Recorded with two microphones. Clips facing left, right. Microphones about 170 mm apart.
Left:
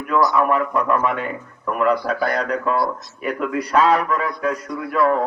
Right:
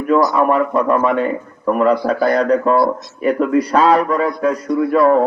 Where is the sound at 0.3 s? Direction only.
35° right (ahead or behind).